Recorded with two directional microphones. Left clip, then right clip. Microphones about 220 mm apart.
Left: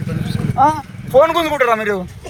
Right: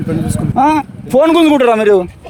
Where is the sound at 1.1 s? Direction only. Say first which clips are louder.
Right 3 dB; 50° right (ahead or behind).